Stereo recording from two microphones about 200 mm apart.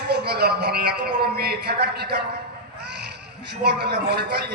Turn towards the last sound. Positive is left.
turn(degrees=-55)  # may be behind; listen again after turning